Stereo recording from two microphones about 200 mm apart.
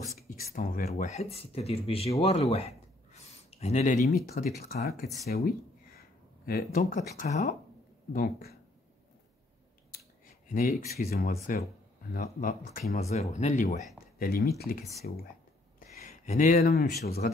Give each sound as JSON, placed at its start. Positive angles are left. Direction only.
{"t": 0.3, "sound": "speech", "side_deg": 45}
{"t": 4.3, "sound": "speech", "side_deg": 50}
{"t": 5.3, "sound": "a sound", "side_deg": 50}
{"t": 6.8, "sound": "speech", "side_deg": 35}
{"t": 8.1, "sound": "speech", "side_deg": 50}
{"t": 9.9, "sound": "a sound", "side_deg": 45}
{"t": 11.0, "sound": "speech", "side_deg": 50}
{"t": 14.1, "sound": "speech", "side_deg": 45}
{"t": 15.9, "sound": "speech", "side_deg": 35}